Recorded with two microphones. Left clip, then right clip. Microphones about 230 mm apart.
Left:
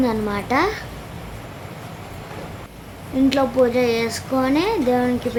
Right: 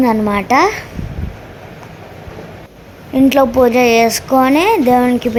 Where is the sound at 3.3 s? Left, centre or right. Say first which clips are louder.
Right 7 dB; right.